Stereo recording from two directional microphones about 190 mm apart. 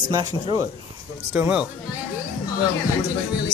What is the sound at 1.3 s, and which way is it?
Speech, 5° right (ahead or behind).